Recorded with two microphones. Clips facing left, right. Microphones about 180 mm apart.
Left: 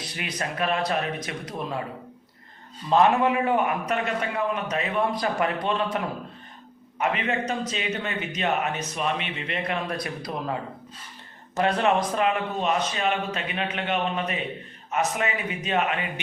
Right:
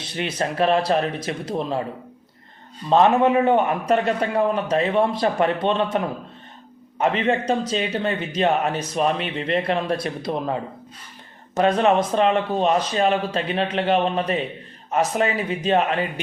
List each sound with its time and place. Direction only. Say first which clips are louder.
0.0 s a man's voice: right 6 dB; 30° right (ahead or behind)
2.9 s a man's voice: right 4 dB; 25° right (ahead or behind)
7.0 s a man's voice: right 5 dB; 30° right (ahead or behind)